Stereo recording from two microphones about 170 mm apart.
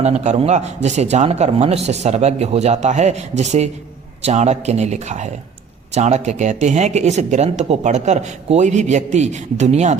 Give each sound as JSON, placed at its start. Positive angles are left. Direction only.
{"t": 0.0, "sound": "a man's voice", "side_deg": -40}